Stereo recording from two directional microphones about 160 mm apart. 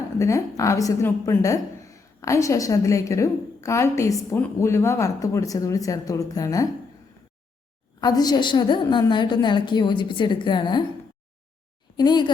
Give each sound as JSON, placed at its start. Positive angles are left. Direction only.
{"t": 0.2, "sound": "a woman's voice", "side_deg": 20}
{"t": 8.0, "sound": "a woman's voice", "side_deg": 25}
{"t": 11.9, "sound": "a woman's voice", "side_deg": 25}